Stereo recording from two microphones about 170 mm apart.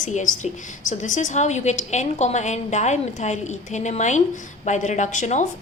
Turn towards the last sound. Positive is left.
turn(degrees=45)  # may be behind; listen again after turning